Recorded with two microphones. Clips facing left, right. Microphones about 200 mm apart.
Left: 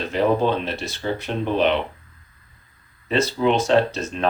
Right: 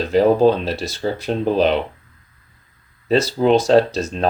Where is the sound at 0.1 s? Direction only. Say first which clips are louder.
Right 6 dB; 35° right (ahead or behind).